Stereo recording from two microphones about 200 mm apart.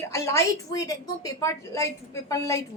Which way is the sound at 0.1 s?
15° left (ahead or behind).